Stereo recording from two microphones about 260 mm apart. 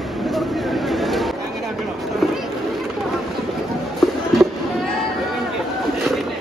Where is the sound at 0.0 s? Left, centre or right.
Centre.